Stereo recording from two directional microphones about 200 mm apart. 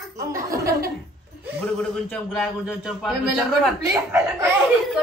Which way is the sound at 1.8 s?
Centre (ahead or behind).